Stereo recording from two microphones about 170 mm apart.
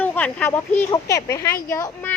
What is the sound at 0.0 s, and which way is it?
A woman's voice, 10° left (ahead or behind).